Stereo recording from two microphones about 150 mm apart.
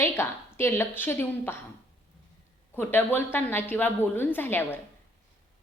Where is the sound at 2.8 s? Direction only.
15° left (ahead or behind).